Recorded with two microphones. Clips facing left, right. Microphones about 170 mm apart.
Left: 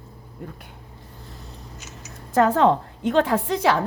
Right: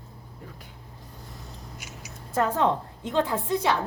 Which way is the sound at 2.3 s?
90° left.